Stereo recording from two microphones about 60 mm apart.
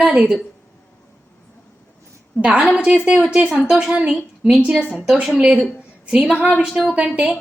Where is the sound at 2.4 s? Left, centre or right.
Centre.